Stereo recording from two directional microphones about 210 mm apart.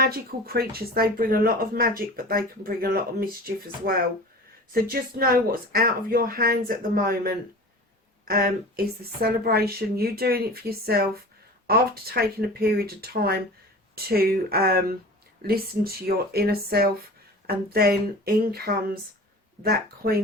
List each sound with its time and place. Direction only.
0.0 s speech: 45° right (ahead or behind)